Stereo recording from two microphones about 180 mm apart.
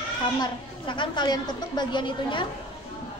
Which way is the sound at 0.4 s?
25° left (ahead or behind).